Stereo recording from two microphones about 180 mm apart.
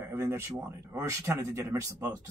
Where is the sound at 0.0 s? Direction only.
15° right (ahead or behind).